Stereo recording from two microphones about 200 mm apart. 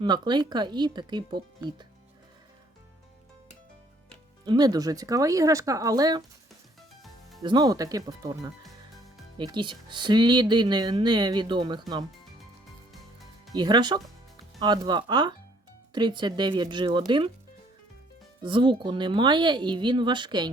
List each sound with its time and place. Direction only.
0.0 s speech: 20° right (ahead or behind)
4.4 s speech: 20° right (ahead or behind)
7.0 s music: centre (ahead or behind)
7.4 s speech: 20° right (ahead or behind)
13.5 s speech: 20° right (ahead or behind)
18.4 s speech: 25° right (ahead or behind)